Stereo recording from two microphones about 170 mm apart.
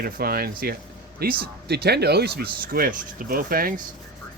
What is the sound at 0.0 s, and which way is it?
Speech, 60° right (ahead or behind).